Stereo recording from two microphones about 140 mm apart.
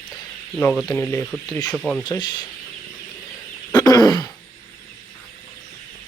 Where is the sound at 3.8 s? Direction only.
25° left (ahead or behind).